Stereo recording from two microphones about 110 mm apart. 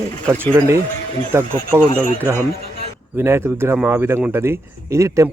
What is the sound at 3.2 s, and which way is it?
Speech, 20° right (ahead or behind).